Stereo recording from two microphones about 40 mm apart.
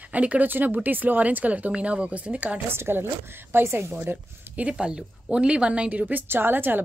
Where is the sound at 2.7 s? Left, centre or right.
Right.